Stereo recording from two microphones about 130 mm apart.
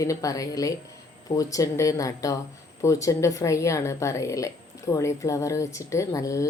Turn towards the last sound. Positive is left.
turn(degrees=25)  # may be behind; listen again after turning